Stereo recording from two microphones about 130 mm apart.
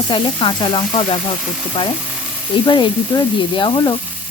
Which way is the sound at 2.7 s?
40° left (ahead or behind).